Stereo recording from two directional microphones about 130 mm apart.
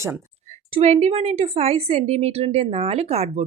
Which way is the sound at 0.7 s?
55° right (ahead or behind).